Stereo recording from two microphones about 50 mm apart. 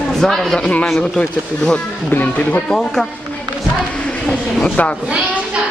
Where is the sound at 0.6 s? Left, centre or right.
Left.